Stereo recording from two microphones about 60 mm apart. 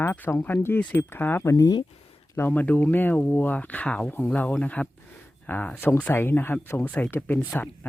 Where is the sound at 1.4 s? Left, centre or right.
Left.